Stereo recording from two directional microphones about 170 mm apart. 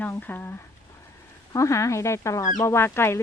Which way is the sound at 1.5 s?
20° left (ahead or behind).